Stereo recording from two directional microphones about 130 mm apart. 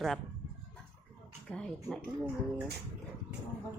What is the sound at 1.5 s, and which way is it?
Speech, 5° left (ahead or behind).